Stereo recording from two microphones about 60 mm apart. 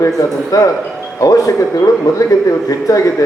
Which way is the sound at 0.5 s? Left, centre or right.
Left.